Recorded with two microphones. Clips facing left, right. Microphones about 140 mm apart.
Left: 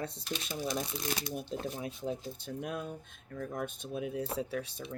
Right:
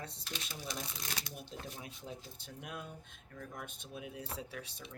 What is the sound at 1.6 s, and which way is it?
Speech, 40° left (ahead or behind).